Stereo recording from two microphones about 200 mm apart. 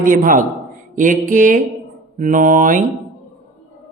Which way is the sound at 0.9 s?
40° right (ahead or behind).